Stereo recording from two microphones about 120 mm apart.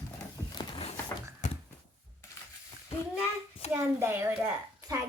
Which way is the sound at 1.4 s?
90° left.